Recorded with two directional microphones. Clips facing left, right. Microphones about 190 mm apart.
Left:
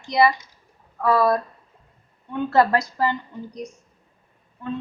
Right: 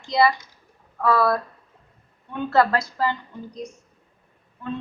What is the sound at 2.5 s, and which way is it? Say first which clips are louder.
Speech: left 1 dB; 20° left (ahead or behind).